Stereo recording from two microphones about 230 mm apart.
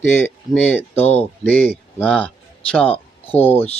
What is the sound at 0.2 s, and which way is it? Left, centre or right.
A man's voice, centre.